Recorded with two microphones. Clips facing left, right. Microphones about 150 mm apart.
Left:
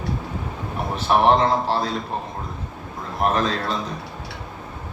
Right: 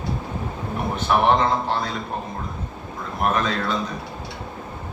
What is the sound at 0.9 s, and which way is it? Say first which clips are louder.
Speech: left 2 dB; 35° left (ahead or behind).